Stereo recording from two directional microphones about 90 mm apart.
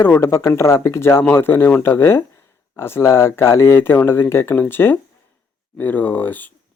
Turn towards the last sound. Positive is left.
turn(degrees=20)  # may be behind; listen again after turning